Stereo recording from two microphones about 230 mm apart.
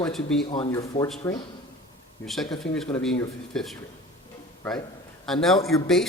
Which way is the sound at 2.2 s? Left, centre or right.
Centre.